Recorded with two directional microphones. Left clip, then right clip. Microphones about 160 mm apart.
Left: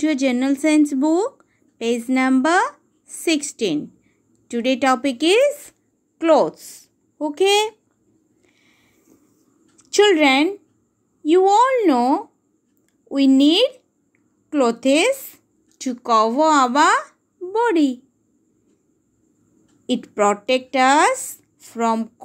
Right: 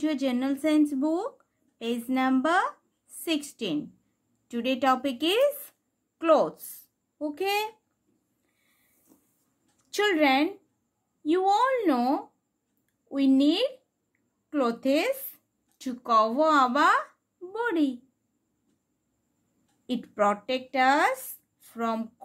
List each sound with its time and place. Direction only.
0.0 s a woman's voice: 30° left (ahead or behind)
9.8 s speech: 30° left (ahead or behind)
19.9 s speech: 30° left (ahead or behind)